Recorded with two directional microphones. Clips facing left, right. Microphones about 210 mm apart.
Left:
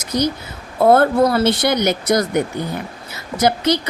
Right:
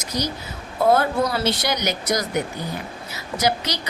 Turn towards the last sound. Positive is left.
turn(degrees=55)  # may be behind; listen again after turning